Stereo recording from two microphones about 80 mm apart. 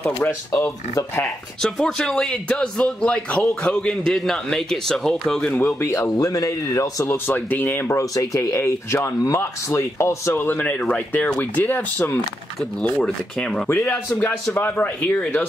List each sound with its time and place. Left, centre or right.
0.5 s speech: left
1.6 s a man's voice: centre
5.6 s speech: left
5.9 s speech: left
6.1 s speech: left
7.1 s speech: left
8.0 s speech: left
13.8 s speech: left